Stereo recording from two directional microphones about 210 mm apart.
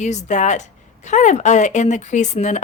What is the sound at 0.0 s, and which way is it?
Speech, 35° left (ahead or behind).